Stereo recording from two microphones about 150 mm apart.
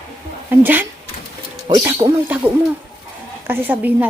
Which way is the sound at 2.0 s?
30° right (ahead or behind).